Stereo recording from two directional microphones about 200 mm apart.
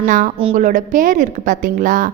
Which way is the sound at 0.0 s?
45° right (ahead or behind).